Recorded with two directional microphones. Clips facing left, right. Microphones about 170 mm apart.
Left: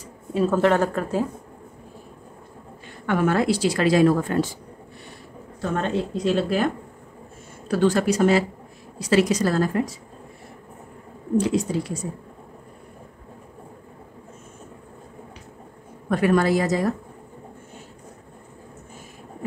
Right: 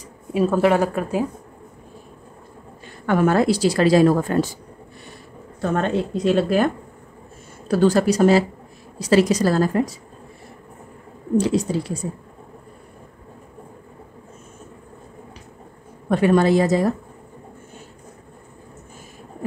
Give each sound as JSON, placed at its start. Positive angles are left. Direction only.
{"t": 0.3, "sound": "a woman's voice", "side_deg": -10}
{"t": 3.1, "sound": "a woman's voice", "side_deg": -40}
{"t": 5.8, "sound": "a woman's voice", "side_deg": -55}
{"t": 7.6, "sound": "a woman's voice", "side_deg": -40}
{"t": 11.3, "sound": "a woman's voice", "side_deg": -35}
{"t": 16.1, "sound": "a woman's voice", "side_deg": -25}